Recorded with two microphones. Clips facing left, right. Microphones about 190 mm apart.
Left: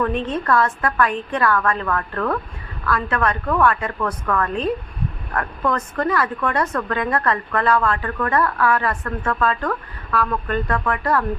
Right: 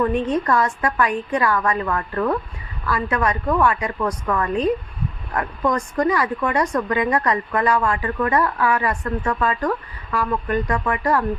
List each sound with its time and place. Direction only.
0.0 s a woman's voice: 15° right (ahead or behind)